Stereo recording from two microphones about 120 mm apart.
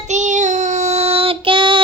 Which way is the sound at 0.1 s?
85° right.